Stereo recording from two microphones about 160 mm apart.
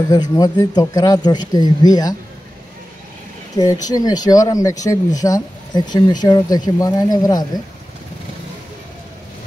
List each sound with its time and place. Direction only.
0.1 s speech: 25° left (ahead or behind)
3.5 s speech: 25° left (ahead or behind)